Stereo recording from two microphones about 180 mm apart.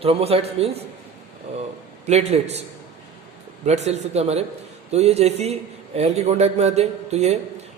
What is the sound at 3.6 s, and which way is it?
A man's voice, 40° right (ahead or behind).